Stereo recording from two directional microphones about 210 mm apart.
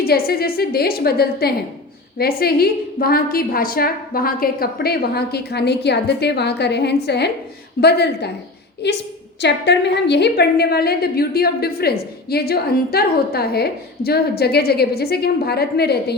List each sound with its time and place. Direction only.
0.0 s a woman's voice: 45° left (ahead or behind)